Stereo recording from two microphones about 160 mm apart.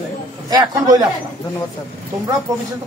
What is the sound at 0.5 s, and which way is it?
Speech, 25° right (ahead or behind).